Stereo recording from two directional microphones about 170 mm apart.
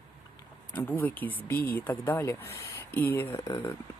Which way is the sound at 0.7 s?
10° left (ahead or behind).